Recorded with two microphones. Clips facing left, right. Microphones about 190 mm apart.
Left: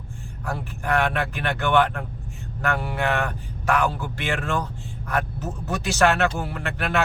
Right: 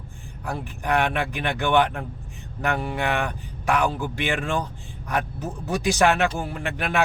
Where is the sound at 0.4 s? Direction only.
15° right (ahead or behind).